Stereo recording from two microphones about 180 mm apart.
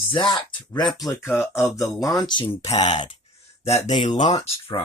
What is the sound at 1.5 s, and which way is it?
Mantra, 15° left (ahead or behind).